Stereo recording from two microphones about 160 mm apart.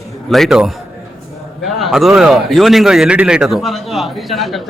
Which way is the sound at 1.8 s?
Centre (ahead or behind).